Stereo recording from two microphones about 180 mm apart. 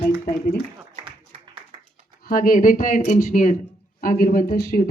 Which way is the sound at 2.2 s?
50° left (ahead or behind).